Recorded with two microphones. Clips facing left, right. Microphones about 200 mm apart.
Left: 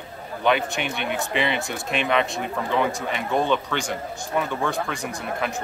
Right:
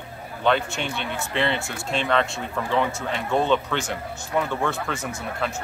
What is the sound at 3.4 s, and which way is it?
Speech, 10° left (ahead or behind).